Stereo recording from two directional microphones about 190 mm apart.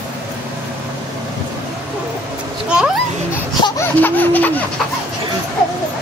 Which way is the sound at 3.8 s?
10° left (ahead or behind).